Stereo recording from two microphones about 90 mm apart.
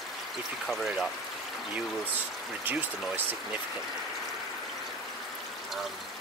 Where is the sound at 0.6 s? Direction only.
Centre (ahead or behind).